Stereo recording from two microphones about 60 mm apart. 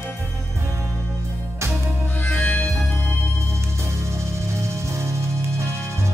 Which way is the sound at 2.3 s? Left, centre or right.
Left.